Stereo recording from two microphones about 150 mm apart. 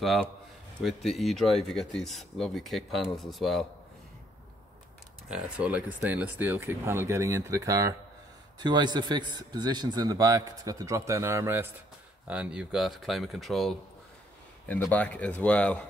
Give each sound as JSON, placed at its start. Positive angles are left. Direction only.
{"t": 0.0, "sound": "speech", "side_deg": 0}
{"t": 5.3, "sound": "a man's voice", "side_deg": -10}